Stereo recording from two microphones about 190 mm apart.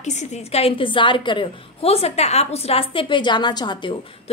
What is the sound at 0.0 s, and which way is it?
A woman's voice, 35° left (ahead or behind).